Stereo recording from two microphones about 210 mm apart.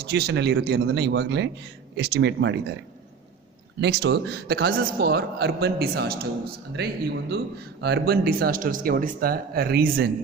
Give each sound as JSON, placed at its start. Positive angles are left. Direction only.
{"t": 0.0, "sound": "a man's voice", "side_deg": -50}
{"t": 3.8, "sound": "a man's voice", "side_deg": -50}